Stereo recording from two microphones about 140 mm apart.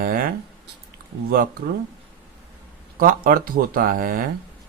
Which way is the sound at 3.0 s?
85° right.